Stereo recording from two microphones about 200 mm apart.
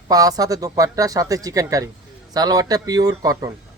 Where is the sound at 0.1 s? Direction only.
20° right (ahead or behind).